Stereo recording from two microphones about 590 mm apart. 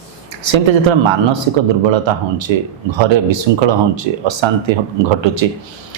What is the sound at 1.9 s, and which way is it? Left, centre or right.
Speech, right.